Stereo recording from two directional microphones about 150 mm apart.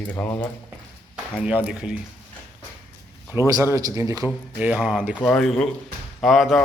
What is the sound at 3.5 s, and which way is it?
Speech, 20° right (ahead or behind).